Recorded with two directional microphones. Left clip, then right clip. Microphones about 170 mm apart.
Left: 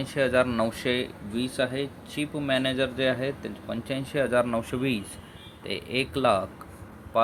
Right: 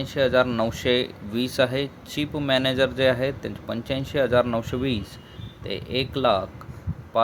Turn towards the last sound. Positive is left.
turn(degrees=-10)  # may be behind; listen again after turning